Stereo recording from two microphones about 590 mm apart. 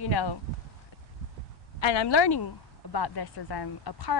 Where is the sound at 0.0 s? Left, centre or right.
Left.